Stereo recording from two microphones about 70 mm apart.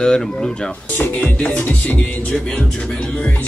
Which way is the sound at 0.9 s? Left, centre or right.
Left.